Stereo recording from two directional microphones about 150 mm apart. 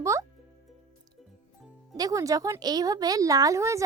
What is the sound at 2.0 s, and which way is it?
A child's voice, 20° right (ahead or behind).